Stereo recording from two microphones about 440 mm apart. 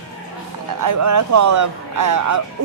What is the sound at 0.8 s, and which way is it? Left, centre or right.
Speech, right.